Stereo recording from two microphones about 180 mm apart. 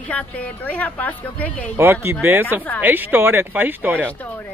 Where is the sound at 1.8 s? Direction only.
15° right (ahead or behind).